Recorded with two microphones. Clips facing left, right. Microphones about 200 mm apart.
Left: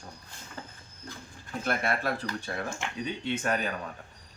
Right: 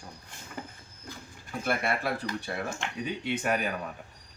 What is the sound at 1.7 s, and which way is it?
Speech, 5° right (ahead or behind).